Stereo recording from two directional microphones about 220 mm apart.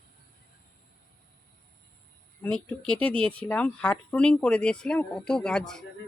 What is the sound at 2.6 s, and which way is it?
Speech, 5° left (ahead or behind).